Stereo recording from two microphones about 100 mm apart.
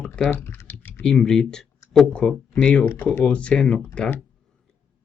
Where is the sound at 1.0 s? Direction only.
5° left (ahead or behind).